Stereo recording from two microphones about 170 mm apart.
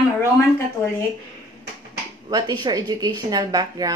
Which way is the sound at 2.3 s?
25° right (ahead or behind).